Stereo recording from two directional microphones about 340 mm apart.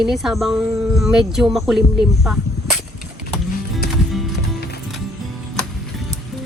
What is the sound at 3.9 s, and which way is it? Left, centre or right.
Music, centre.